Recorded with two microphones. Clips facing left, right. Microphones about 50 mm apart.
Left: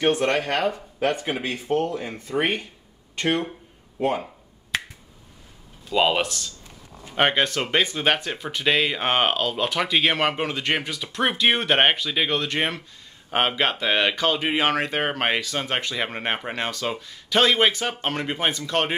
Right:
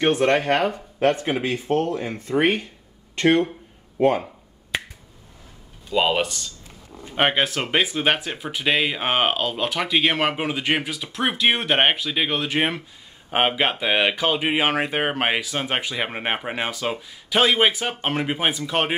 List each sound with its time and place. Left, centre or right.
0.1 s speech: centre
1.4 s speech: right
2.0 s speech: centre
4.0 s speech: centre
4.7 s finger snapping: centre
5.9 s speech: centre